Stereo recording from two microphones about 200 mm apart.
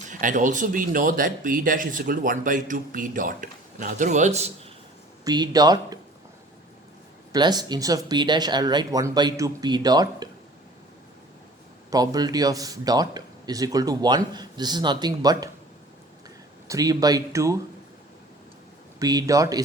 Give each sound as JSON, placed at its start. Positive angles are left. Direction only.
{"t": 0.1, "sound": "speech", "side_deg": -40}
{"t": 5.2, "sound": "a man's voice", "side_deg": -20}
{"t": 7.3, "sound": "a man's voice", "side_deg": -20}
{"t": 11.9, "sound": "a man's voice", "side_deg": -20}
{"t": 16.6, "sound": "speech", "side_deg": -20}
{"t": 18.9, "sound": "speech", "side_deg": -15}